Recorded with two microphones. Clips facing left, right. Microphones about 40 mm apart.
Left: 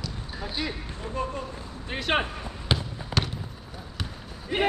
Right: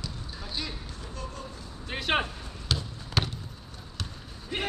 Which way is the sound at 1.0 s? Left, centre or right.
Left.